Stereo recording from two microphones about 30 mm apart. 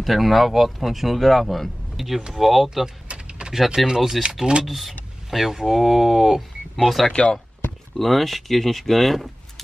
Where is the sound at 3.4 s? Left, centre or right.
Right.